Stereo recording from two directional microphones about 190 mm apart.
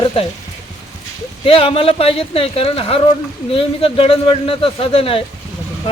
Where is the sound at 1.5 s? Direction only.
30° left (ahead or behind).